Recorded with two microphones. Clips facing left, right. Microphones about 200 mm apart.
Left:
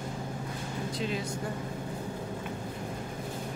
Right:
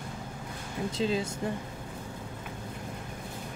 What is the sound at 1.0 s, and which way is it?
Music, 30° right (ahead or behind).